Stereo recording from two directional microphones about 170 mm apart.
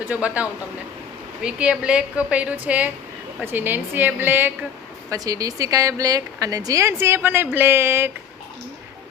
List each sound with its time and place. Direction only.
0.0 s a woman's voice: 10° right (ahead or behind)